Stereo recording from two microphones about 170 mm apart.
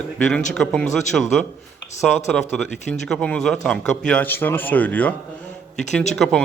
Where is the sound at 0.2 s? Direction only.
5° left (ahead or behind).